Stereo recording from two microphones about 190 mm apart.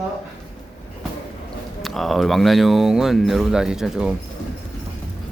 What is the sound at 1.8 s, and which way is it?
Speech, centre (ahead or behind).